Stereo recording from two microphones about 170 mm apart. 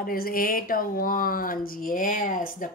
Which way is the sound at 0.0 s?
60° left (ahead or behind).